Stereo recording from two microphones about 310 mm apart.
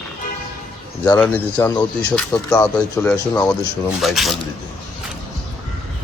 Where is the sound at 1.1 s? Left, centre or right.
Centre.